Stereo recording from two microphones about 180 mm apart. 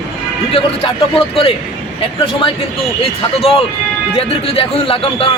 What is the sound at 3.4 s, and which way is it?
A man's voice, 30° left (ahead or behind).